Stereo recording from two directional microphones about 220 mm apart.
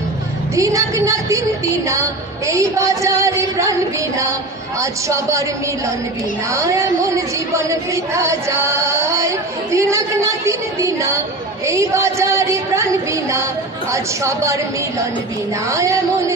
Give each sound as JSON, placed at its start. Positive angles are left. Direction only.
{"t": 0.6, "sound": "a woman's voice", "side_deg": -15}
{"t": 6.5, "sound": "a woman's voice", "side_deg": -15}